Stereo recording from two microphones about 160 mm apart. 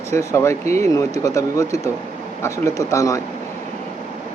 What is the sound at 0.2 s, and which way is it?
Speech, 20° left (ahead or behind).